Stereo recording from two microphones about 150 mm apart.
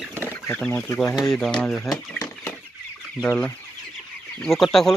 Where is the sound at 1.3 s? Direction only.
5° left (ahead or behind).